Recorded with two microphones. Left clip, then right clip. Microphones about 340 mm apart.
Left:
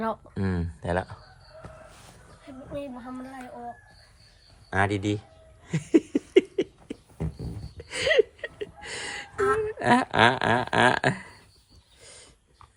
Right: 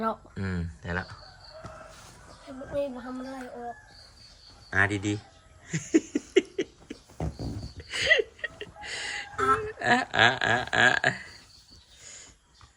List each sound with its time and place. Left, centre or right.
0.0 s speech: centre
4.7 s speech: centre
5.6 s laughter: centre
7.8 s music: centre
12.0 s dog: centre